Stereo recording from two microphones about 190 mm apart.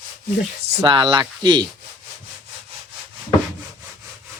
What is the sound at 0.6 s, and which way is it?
Speech, 25° right (ahead or behind).